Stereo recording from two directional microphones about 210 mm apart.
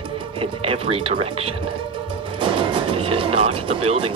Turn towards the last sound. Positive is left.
turn(degrees=-25)  # may be behind; listen again after turning